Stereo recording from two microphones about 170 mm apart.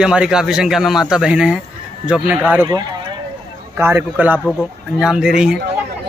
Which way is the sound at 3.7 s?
15° right (ahead or behind).